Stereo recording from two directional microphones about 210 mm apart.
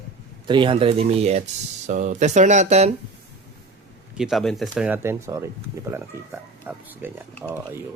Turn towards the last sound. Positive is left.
turn(degrees=-10)  # may be behind; listen again after turning